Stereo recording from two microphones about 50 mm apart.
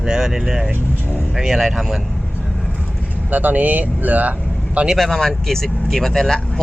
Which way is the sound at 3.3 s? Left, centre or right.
Right.